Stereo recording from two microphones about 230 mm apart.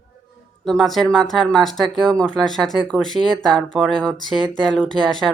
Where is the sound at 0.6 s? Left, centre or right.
Centre.